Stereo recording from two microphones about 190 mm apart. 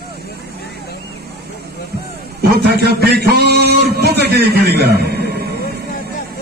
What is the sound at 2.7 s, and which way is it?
A man's voice, 55° right (ahead or behind).